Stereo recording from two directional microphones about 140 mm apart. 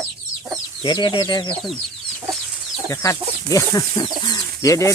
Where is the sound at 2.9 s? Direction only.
25° left (ahead or behind).